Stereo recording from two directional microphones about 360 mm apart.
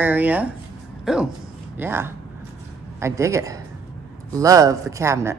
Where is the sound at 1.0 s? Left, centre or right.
Centre.